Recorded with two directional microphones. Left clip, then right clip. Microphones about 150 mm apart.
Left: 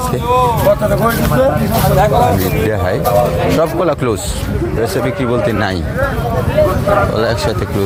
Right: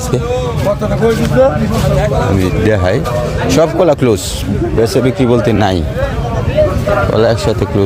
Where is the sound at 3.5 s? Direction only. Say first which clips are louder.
Right 4 dB; 90° right.